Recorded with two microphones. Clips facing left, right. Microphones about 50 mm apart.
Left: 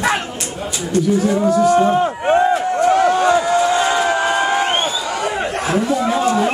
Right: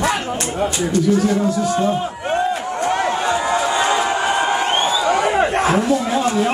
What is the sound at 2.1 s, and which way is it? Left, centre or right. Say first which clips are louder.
Speech: left 5 dB; left.